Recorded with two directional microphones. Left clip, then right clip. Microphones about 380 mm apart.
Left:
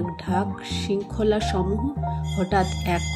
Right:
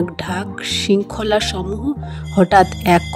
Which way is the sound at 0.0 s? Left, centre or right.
Right.